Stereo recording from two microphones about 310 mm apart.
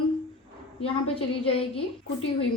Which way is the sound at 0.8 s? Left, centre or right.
Centre.